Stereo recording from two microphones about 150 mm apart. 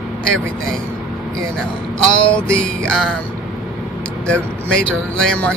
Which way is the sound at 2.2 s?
5° left (ahead or behind).